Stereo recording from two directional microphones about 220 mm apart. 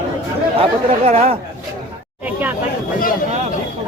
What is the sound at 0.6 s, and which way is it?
Speech, 30° right (ahead or behind).